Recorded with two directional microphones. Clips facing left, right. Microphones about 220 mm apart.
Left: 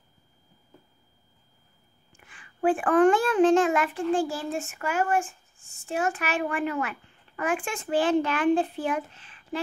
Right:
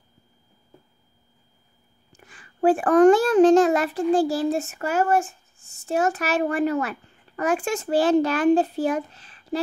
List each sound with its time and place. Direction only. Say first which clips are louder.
2.1 s a child's voice: right 6 dB; 40° right (ahead or behind)